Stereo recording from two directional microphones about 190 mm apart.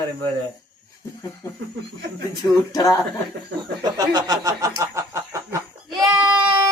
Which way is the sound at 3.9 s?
20° right (ahead or behind).